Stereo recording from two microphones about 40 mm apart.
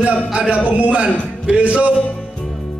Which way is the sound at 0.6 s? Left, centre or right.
Right.